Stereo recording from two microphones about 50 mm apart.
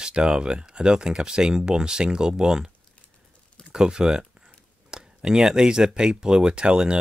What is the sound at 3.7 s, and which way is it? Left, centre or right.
Speech, centre.